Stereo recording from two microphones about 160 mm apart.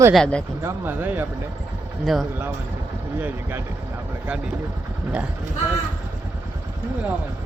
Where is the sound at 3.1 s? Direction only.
15° right (ahead or behind).